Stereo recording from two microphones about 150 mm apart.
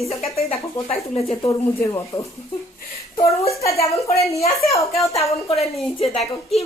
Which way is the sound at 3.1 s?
40° left (ahead or behind).